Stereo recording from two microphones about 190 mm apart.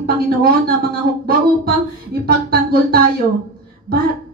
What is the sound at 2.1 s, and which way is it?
Speech, 55° right (ahead or behind).